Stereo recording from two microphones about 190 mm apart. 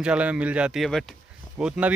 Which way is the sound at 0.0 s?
5° right (ahead or behind).